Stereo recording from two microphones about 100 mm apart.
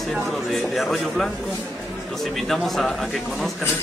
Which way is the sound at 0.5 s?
Centre (ahead or behind).